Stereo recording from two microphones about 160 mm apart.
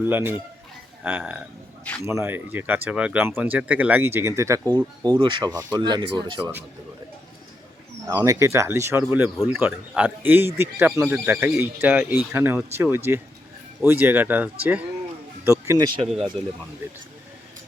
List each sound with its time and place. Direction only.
0.0 s speech: 15° right (ahead or behind); by 6.4 s 30° right (ahead or behind)
8.0 s speech: 20° right (ahead or behind)